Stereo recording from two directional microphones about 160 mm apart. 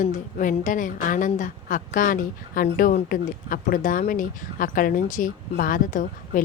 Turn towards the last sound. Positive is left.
turn(degrees=55)  # may be behind; listen again after turning